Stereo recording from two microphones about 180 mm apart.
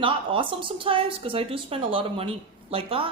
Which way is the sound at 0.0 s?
30° right (ahead or behind).